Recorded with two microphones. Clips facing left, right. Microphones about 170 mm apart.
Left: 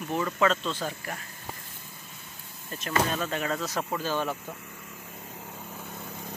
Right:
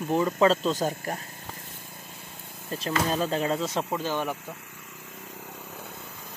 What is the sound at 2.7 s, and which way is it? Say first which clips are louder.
Speech: right 1 dB; 30° right (ahead or behind).